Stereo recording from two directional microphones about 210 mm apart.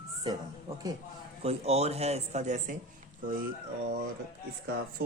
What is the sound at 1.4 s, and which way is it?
Speech, 30° right (ahead or behind).